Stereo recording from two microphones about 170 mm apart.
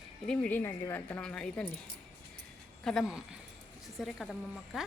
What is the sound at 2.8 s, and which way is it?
A woman's voice, centre (ahead or behind).